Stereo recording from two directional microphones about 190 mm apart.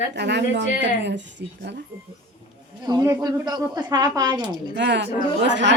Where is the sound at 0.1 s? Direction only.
65° right (ahead or behind).